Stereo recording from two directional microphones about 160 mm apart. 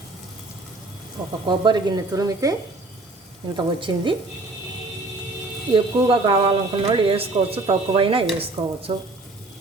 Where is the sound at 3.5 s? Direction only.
30° right (ahead or behind).